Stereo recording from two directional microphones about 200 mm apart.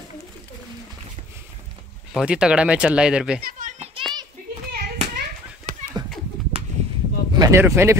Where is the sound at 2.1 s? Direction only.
5° right (ahead or behind).